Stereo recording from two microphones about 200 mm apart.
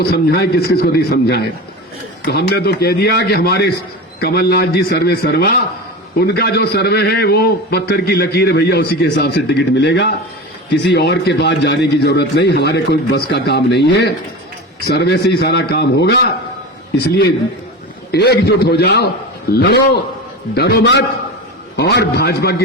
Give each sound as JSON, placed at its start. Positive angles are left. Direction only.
{"t": 0.0, "sound": "a man's voice", "side_deg": 50}